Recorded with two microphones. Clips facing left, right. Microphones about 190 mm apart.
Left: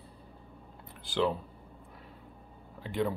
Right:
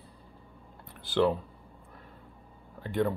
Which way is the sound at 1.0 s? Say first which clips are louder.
Right 4 dB; centre (ahead or behind).